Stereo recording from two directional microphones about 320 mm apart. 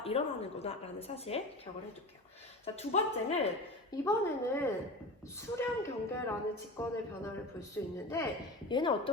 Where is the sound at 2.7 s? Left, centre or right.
Centre.